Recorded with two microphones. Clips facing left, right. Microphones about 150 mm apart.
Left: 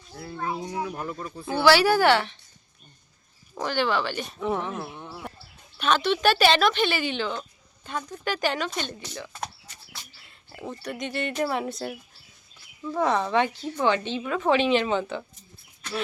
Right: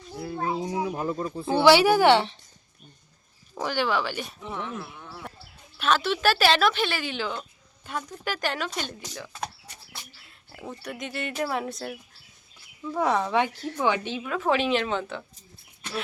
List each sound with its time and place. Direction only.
0.1 s speech: 10° right (ahead or behind)
0.3 s speech: 25° right (ahead or behind)
3.5 s speech: 10° right (ahead or behind)
4.5 s speech: 40° left (ahead or behind)
5.7 s speech: centre (ahead or behind)